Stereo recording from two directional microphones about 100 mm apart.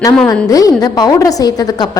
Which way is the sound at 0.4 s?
35° left (ahead or behind).